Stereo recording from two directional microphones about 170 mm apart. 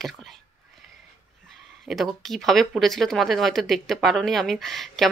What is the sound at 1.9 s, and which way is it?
Speech, centre (ahead or behind).